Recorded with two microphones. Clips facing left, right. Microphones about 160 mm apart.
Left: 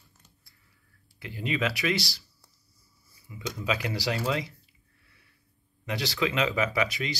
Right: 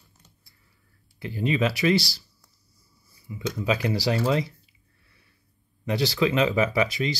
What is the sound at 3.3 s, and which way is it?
Speech, 30° right (ahead or behind).